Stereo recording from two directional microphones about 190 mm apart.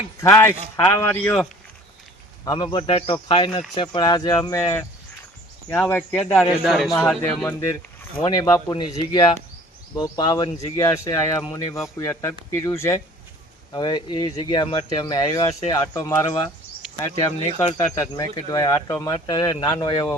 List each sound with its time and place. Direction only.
0.2 s speech: 10° left (ahead or behind)
2.4 s speech: 20° left (ahead or behind)
6.5 s a man's voice: centre (ahead or behind)
7.2 s speech: 15° left (ahead or behind)